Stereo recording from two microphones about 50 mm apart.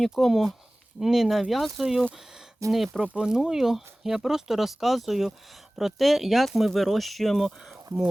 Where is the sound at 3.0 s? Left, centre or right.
Centre.